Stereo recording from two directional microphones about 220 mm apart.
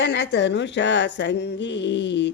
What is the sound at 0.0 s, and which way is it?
A woman's voice, 50° left (ahead or behind).